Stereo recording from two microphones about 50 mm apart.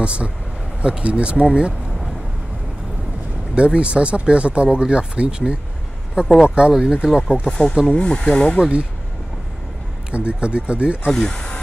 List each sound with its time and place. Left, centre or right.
0.0 s speech: right
3.5 s speech: right
7.8 s speech: left
8.5 s speech: centre
10.1 s speech: right
11.1 s speech: centre